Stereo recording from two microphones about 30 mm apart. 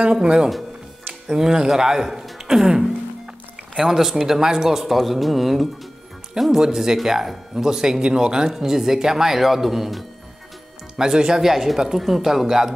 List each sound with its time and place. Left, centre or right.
0.1 s speech: right
2.3 s throat clearing: centre
3.7 s a man's voice: centre
6.6 s speech: centre
7.8 s speech: right
8.5 s speech: centre
11.1 s speech: right
11.4 s speech: centre